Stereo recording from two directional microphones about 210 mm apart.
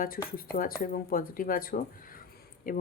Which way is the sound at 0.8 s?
45° left (ahead or behind).